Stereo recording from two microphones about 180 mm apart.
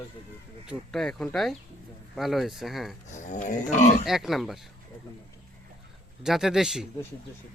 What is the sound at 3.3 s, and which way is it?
Livestock, 45° left (ahead or behind).